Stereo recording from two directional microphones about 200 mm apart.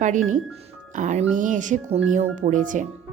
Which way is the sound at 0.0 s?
40° right (ahead or behind).